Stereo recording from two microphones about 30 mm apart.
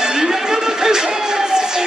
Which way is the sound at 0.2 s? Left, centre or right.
Centre.